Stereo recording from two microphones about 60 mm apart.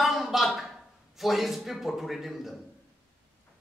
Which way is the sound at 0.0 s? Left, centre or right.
Centre.